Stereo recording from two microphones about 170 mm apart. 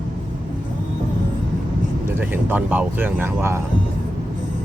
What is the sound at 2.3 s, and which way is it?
Speech, 10° right (ahead or behind).